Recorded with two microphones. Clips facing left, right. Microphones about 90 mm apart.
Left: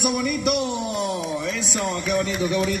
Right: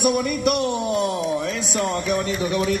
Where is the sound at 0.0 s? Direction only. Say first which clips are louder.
Right 3 dB; 40° right (ahead or behind).